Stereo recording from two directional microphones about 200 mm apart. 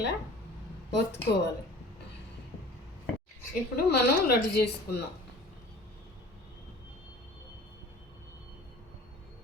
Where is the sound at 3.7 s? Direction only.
50° left (ahead or behind).